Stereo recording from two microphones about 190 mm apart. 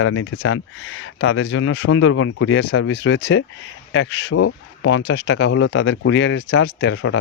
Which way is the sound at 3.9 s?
75° left (ahead or behind).